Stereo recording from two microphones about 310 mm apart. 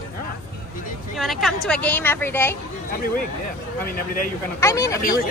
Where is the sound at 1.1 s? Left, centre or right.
Centre.